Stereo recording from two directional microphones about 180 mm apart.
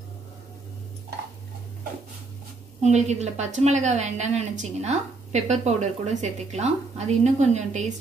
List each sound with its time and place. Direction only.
2.8 s a woman's voice: 40° right (ahead or behind)